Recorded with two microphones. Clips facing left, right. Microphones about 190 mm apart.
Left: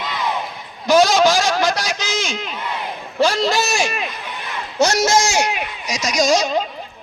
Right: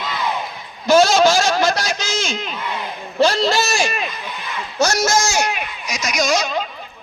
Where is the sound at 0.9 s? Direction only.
15° left (ahead or behind).